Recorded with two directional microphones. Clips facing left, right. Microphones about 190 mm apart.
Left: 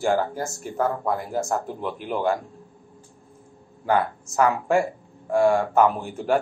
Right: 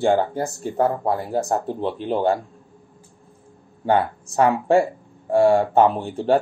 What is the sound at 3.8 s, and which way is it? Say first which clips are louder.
Speech: right 3 dB; 30° right (ahead or behind).